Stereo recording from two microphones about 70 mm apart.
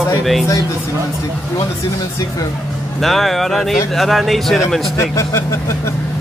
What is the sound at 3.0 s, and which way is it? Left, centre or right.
Speech, centre.